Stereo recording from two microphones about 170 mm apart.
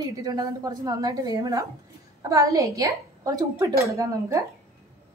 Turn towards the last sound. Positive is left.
turn(degrees=-20)  # may be behind; listen again after turning